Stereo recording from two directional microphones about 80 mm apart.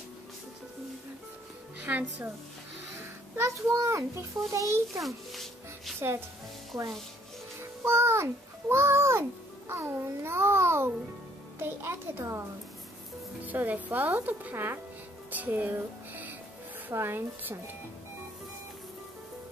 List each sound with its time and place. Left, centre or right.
1.8 s speech: right
3.3 s a child's voice: right
4.9 s music: centre
5.9 s speech: right
7.8 s a child's voice: right
13.5 s speech: right
16.9 s speech: right